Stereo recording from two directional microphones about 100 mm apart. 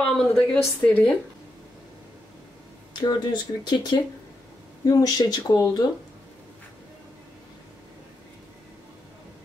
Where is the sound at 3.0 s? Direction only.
50° left (ahead or behind).